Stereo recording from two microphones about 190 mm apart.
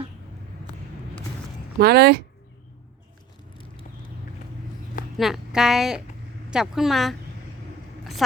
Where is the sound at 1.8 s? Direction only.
55° right (ahead or behind).